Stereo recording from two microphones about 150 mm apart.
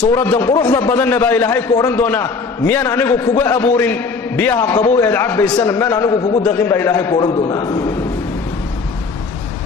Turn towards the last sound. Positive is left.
turn(degrees=30)  # may be behind; listen again after turning